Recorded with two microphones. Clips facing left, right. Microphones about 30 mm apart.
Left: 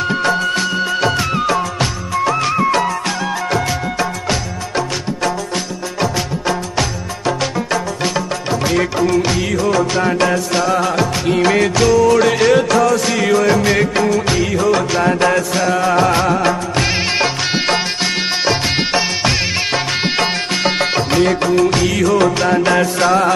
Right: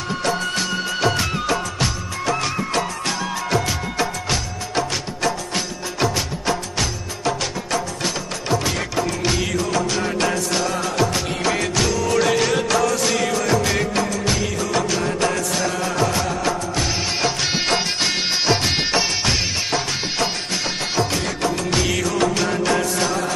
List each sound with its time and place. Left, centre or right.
0.6 s music: centre
1.4 s music of bollywood: centre
3.4 s music: centre
8.6 s music: centre
11.7 s music: centre
13.2 s music of bollywood: left
15.9 s music of bollywood: left
17.5 s music: centre
19.7 s music: left
21.5 s music of bollywood: centre
22.5 s music: left
23.0 s music: left